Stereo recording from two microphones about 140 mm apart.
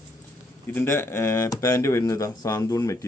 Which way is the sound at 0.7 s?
15° left (ahead or behind).